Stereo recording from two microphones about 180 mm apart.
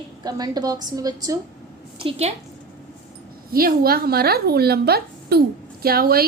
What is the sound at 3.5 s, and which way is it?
A woman's voice, 55° right (ahead or behind).